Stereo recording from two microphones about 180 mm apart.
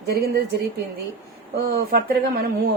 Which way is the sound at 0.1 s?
55° right (ahead or behind).